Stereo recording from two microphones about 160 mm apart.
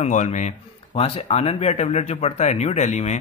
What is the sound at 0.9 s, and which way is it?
Speech, 35° left (ahead or behind).